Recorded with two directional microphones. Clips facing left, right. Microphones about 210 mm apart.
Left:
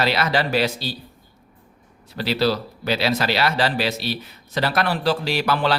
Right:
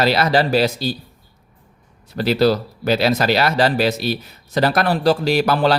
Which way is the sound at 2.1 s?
45° right (ahead or behind).